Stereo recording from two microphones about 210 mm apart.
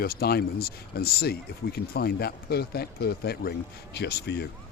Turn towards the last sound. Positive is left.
turn(degrees=50)  # may be behind; listen again after turning